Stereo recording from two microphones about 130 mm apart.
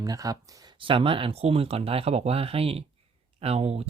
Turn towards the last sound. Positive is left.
turn(degrees=-55)  # may be behind; listen again after turning